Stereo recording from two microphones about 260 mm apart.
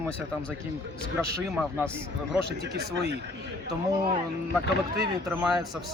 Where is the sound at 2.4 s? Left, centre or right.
Right.